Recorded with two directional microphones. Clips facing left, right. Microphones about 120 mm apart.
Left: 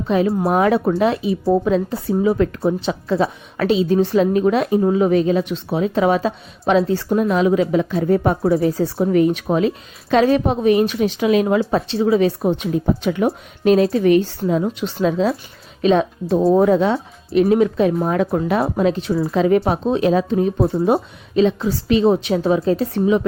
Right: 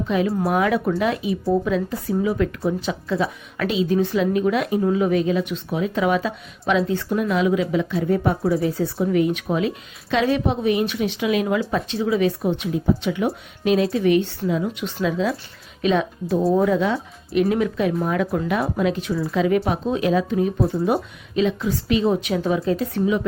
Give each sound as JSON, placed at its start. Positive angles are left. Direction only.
{"t": 0.1, "sound": "speech", "side_deg": 35}
{"t": 8.5, "sound": "speech", "side_deg": 30}
{"t": 13.7, "sound": "speech", "side_deg": 35}